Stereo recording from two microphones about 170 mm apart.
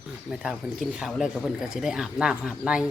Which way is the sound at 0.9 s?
Centre (ahead or behind).